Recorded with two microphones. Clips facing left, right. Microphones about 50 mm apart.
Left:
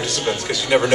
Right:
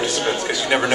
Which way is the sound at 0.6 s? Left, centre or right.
Centre.